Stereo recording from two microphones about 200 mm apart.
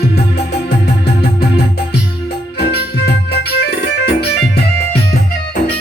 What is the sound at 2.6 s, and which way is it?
Music, 55° left (ahead or behind).